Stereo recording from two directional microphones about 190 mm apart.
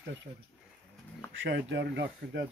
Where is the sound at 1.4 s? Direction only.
65° right (ahead or behind).